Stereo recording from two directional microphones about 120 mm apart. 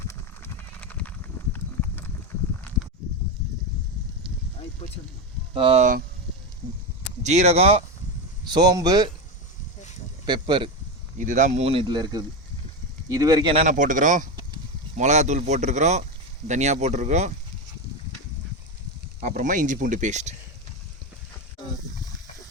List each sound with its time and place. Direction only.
0.1 s horse: 15° left (ahead or behind)
4.8 s speech: 50° left (ahead or behind)
5.5 s speech: 50° right (ahead or behind)
7.2 s speech: 70° right (ahead or behind)
8.4 s speech: 35° right (ahead or behind)
10.2 s speech: 40° right (ahead or behind)
11.2 s speech: 90° right
11.6 s speech: 50° right (ahead or behind); by 13.5 s 30° right (ahead or behind)
13.7 s speech: 90° right
14.9 s speech: 75° right (ahead or behind)
19.2 s speech: 90° right